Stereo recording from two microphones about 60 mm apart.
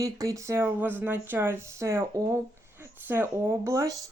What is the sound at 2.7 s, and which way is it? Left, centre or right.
A woman's voice, right.